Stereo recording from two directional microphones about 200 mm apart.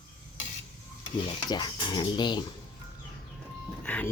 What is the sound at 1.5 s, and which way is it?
Speech, 20° left (ahead or behind).